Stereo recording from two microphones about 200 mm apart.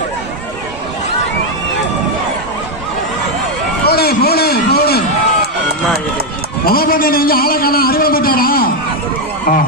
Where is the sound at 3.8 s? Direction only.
50° left (ahead or behind).